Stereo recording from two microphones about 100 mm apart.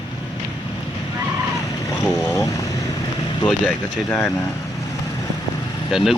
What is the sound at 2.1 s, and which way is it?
Vehicle, 35° left (ahead or behind).